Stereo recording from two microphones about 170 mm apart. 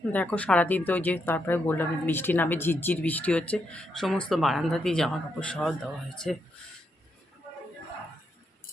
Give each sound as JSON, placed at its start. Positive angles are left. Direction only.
{"t": 0.1, "sound": "speech", "side_deg": 10}